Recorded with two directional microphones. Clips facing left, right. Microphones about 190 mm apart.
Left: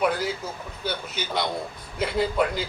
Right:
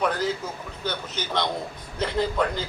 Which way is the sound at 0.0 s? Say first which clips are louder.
Left 1 dB; 10° left (ahead or behind).